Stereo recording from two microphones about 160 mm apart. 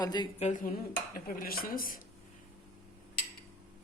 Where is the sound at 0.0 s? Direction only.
25° left (ahead or behind).